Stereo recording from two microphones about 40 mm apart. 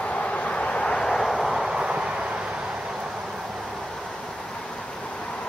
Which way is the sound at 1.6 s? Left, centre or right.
Centre.